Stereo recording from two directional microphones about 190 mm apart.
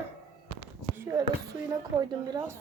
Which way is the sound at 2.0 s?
20° right (ahead or behind).